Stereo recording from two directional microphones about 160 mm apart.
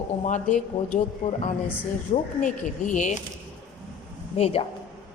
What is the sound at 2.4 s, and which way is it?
Speech, 50° left (ahead or behind).